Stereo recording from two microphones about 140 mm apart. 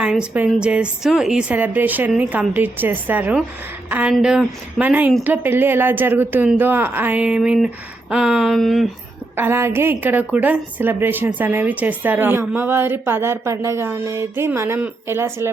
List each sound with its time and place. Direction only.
0.0 s a woman's voice: 5° right (ahead or behind)
8.1 s a sound: 5° right (ahead or behind)
9.3 s a woman's voice: 15° right (ahead or behind)